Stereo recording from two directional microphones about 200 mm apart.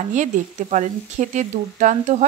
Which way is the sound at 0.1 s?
40° right (ahead or behind).